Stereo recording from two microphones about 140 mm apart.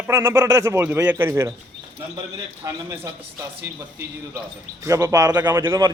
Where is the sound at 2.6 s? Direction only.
25° right (ahead or behind).